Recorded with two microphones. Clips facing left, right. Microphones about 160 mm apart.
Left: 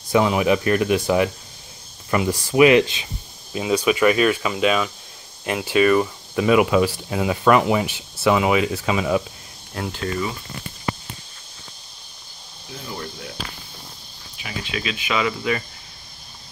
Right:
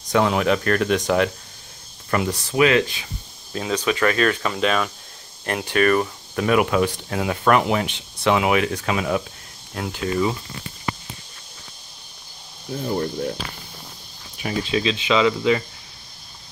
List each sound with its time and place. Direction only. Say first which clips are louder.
0.1 s speech: left 1 dB; 5° left (ahead or behind)
12.8 s speech: right 10 dB; 45° right (ahead or behind)
14.4 s speech: right 7 dB; 35° right (ahead or behind)